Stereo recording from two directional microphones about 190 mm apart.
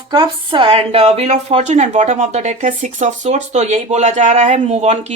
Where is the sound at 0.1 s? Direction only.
25° right (ahead or behind).